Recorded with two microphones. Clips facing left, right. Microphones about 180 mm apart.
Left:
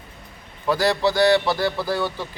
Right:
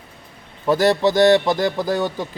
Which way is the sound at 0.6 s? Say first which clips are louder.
Right 4 dB; 20° right (ahead or behind).